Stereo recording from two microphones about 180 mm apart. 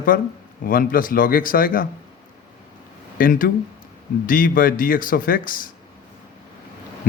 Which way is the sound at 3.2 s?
50° left (ahead or behind).